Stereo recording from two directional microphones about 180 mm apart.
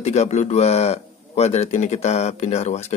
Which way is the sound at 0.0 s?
40° left (ahead or behind).